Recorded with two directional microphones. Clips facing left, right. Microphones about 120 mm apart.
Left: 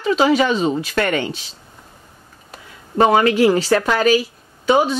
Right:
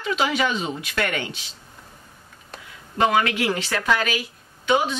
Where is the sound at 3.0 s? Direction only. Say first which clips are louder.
Left 7 dB; 35° left (ahead or behind).